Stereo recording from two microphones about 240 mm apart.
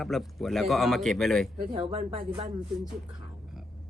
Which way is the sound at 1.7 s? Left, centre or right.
Right.